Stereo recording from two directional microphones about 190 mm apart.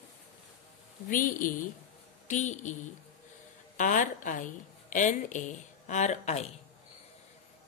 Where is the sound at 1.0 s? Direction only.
45° left (ahead or behind).